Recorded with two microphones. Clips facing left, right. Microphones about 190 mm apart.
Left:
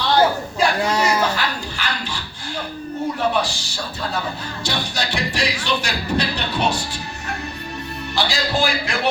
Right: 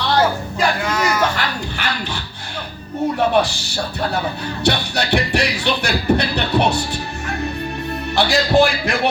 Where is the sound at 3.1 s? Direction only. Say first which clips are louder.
Right 5 dB; 60° right (ahead or behind).